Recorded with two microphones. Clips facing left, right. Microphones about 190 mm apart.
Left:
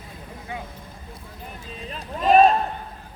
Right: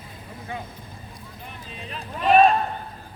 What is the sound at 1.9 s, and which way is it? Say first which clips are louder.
Run: left 1 dB; 40° left (ahead or behind).